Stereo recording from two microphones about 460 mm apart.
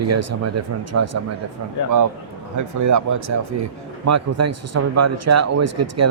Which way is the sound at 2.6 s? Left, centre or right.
Right.